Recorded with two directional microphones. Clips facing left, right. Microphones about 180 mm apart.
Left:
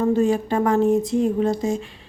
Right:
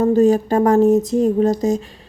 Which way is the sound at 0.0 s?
40° right (ahead or behind).